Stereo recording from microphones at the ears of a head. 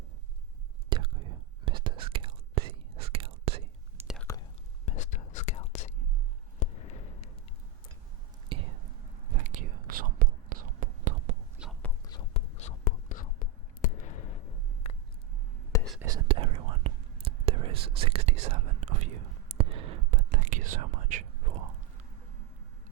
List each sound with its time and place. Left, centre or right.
0.9 s whispering: right
4.9 s whispering: left
6.6 s a sound: left
8.4 s whispering: right
12.0 s whispering: left
16.0 s whispering: right